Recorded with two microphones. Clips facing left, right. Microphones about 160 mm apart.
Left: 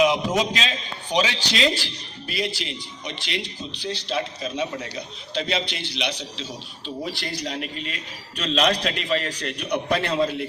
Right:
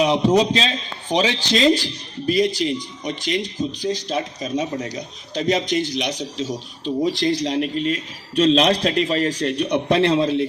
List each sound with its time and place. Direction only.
0.0 s a man's voice: 40° right (ahead or behind)